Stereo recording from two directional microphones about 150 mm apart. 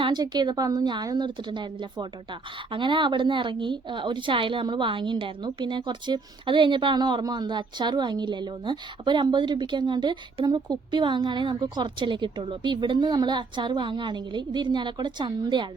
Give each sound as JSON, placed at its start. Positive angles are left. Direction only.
{"t": 0.0, "sound": "a woman's voice", "side_deg": -30}